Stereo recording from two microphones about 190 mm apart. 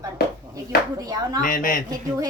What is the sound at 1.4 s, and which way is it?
Speech, 45° left (ahead or behind).